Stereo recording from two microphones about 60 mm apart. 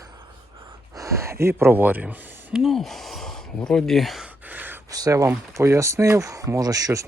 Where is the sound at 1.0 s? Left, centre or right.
Right.